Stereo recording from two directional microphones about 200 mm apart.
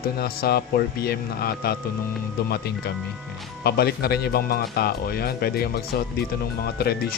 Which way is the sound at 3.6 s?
50° left (ahead or behind).